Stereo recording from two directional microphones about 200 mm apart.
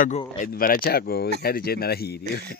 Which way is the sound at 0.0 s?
45° left (ahead or behind).